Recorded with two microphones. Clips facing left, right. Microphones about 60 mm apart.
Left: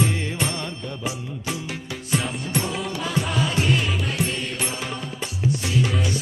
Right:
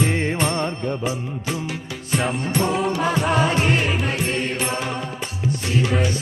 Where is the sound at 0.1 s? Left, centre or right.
Right.